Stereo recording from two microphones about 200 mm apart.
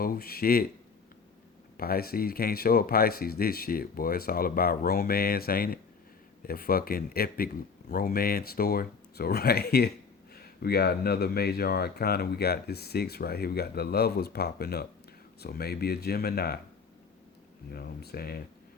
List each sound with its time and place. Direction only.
0.0 s speech: 50° left (ahead or behind)
1.8 s speech: 50° left (ahead or behind)
17.7 s speech: 50° left (ahead or behind)